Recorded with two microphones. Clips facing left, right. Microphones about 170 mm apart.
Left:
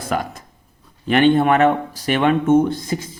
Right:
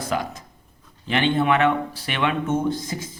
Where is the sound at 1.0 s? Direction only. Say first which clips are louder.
Left 6 dB; 50° left (ahead or behind).